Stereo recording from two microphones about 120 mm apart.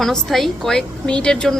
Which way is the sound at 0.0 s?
Centre (ahead or behind).